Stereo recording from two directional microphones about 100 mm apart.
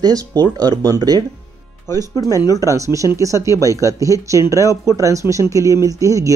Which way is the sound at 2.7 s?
30° right (ahead or behind).